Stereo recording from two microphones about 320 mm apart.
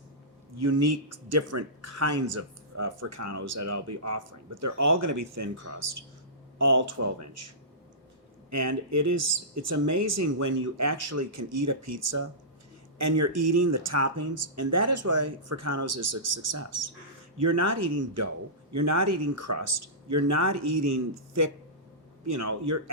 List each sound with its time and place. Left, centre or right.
0.6 s speech: right
7.0 s speech: right
8.4 s speech: right